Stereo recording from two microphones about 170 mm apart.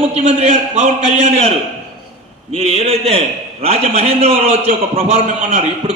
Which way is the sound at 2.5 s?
35° right (ahead or behind).